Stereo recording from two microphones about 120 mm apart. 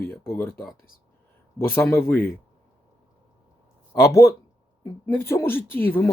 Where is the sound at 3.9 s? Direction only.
25° left (ahead or behind).